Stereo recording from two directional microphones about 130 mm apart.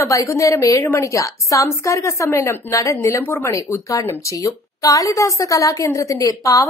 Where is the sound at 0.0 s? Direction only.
25° left (ahead or behind).